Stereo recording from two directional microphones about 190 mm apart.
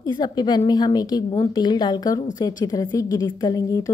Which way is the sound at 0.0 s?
20° left (ahead or behind).